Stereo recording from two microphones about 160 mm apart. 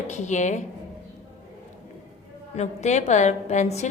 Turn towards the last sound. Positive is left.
turn(degrees=45)  # may be behind; listen again after turning